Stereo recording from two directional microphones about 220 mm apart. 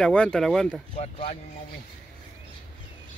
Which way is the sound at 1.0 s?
30° left (ahead or behind).